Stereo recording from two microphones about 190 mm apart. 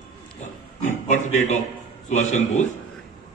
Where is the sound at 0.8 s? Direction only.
40° left (ahead or behind).